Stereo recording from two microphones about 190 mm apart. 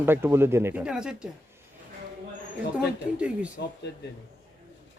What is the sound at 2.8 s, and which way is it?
Speech, 5° right (ahead or behind).